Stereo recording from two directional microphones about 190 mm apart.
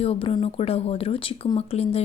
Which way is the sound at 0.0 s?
30° left (ahead or behind).